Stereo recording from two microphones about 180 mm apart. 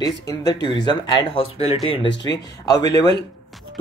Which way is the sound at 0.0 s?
20° left (ahead or behind).